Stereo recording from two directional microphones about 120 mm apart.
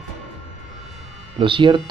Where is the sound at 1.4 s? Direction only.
45° right (ahead or behind).